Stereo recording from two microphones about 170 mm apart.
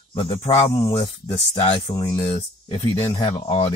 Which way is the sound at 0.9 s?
25° left (ahead or behind).